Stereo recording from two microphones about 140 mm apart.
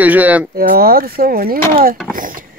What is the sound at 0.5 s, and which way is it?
Speech, 90° right.